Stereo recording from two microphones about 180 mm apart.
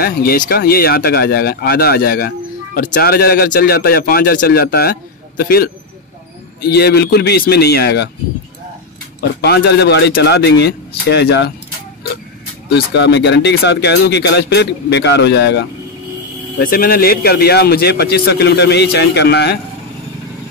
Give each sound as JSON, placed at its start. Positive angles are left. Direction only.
{"t": 0.0, "sound": "speech", "side_deg": 55}
{"t": 9.4, "sound": "speech", "side_deg": 65}
{"t": 12.6, "sound": "speech", "side_deg": 70}
{"t": 16.5, "sound": "speech", "side_deg": 55}